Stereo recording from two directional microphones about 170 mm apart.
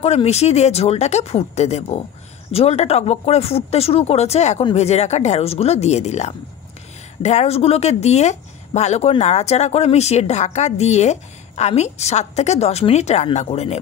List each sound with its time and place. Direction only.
0.0 s speech: 40° left (ahead or behind)